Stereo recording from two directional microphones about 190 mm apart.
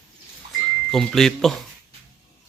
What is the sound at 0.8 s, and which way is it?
Speech, centre (ahead or behind).